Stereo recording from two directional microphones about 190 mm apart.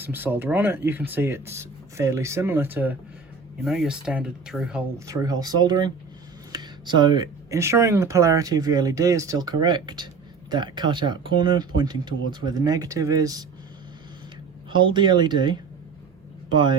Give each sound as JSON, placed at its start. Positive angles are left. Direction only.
{"t": 0.0, "sound": "speech", "side_deg": -10}
{"t": 4.9, "sound": "speech", "side_deg": -15}
{"t": 14.7, "sound": "speech", "side_deg": -25}